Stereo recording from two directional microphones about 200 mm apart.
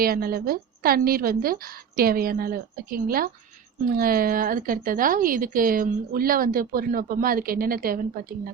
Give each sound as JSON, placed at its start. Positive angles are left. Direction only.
{"t": 0.0, "sound": "a woman's voice", "side_deg": -50}